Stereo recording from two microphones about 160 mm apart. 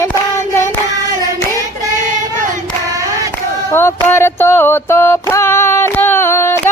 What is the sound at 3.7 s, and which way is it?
Music, 15° left (ahead or behind).